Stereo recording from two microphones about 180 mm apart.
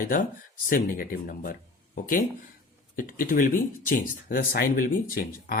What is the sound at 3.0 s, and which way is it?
Speech, 50° left (ahead or behind).